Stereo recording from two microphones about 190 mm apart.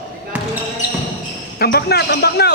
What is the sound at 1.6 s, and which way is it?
Speech, 55° left (ahead or behind).